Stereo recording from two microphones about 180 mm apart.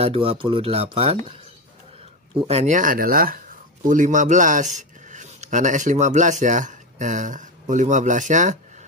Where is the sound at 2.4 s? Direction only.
40° right (ahead or behind).